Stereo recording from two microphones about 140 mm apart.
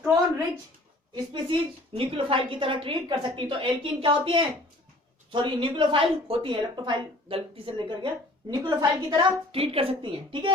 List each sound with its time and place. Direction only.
1.1 s speech: 35° right (ahead or behind)
9.5 s a woman's voice: 45° right (ahead or behind)